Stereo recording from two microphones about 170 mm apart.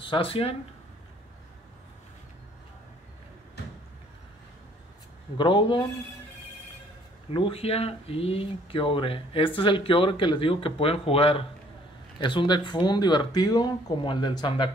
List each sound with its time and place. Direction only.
0.0 s speech: 30° left (ahead or behind)
5.4 s speech: 30° left (ahead or behind)
7.3 s speech: 35° left (ahead or behind)